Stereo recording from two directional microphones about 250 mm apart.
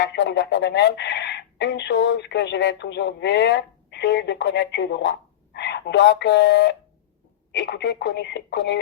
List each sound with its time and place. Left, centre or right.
0.0 s speech: left